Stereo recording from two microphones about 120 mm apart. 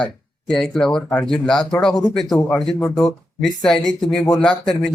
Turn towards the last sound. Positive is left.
turn(degrees=5)  # may be behind; listen again after turning